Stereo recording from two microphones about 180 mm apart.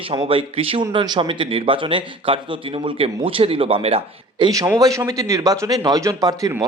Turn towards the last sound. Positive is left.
turn(degrees=-20)  # may be behind; listen again after turning